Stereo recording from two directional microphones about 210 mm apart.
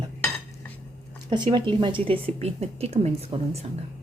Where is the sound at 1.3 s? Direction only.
20° right (ahead or behind).